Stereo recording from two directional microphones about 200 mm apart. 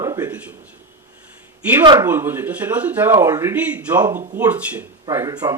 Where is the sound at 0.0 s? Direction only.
20° right (ahead or behind).